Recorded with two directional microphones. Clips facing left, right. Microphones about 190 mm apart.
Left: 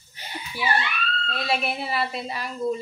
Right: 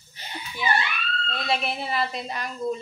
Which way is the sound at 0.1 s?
10° left (ahead or behind).